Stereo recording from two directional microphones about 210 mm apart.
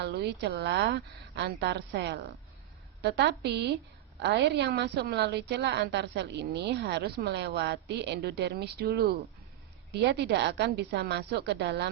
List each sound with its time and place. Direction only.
0.0 s a woman's voice: 55° right (ahead or behind)